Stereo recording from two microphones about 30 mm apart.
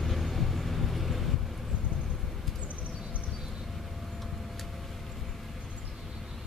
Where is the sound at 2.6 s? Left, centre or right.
Right.